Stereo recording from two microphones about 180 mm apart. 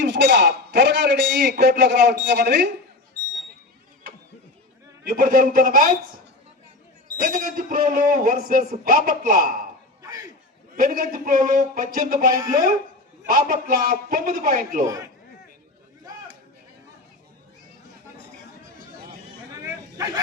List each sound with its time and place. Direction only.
0.0 s a man's voice: 70° right (ahead or behind)
5.0 s a man's voice: 50° right (ahead or behind)
7.2 s a man's voice: 50° right (ahead or behind)
10.0 s a sound: 15° right (ahead or behind)
10.8 s a man's voice: 50° right (ahead or behind)
12.3 s speech: 20° right (ahead or behind)
13.2 s a man's voice: 50° right (ahead or behind)
19.6 s a sound: 20° right (ahead or behind)